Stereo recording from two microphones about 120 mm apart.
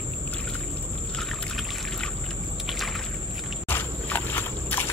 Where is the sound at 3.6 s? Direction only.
15° left (ahead or behind).